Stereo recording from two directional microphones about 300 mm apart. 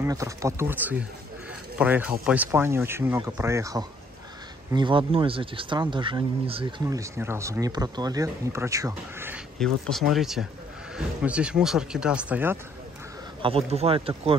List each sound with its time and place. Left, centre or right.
0.0 s speech: centre
13.4 s speech: centre